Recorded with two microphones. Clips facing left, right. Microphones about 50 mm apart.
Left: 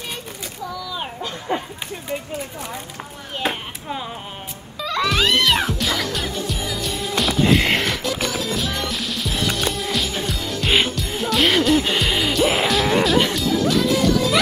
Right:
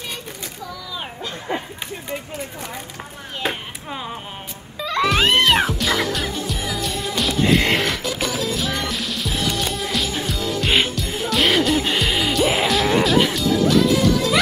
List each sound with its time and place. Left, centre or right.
4.8 s music: centre